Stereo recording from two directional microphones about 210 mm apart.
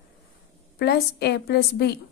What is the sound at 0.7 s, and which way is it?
A woman's voice, 50° left (ahead or behind).